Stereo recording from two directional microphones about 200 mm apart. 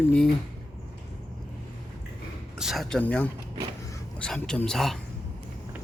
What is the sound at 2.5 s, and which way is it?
Speech, centre (ahead or behind).